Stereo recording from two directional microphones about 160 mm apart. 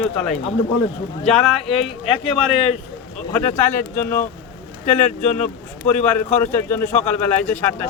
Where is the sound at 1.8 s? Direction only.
35° left (ahead or behind).